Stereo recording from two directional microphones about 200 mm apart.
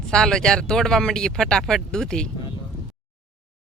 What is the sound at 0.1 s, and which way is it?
Speech, 5° left (ahead or behind).